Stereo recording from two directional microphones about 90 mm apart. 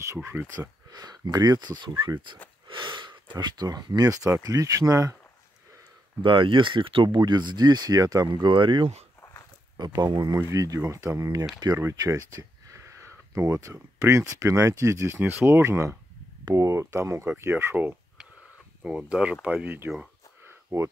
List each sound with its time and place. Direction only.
0.0 s speech: 35° right (ahead or behind)
0.6 s speech: 50° right (ahead or behind)
2.7 s speech: 65° right (ahead or behind); by 5.1 s 40° right (ahead or behind)
6.2 s speech: 70° right (ahead or behind)
7.2 s speech: 55° right (ahead or behind)
9.8 s speech: 50° right (ahead or behind); by 17.9 s 25° right (ahead or behind)
18.8 s speech: 10° right (ahead or behind)
20.4 s a sound: 30° right (ahead or behind)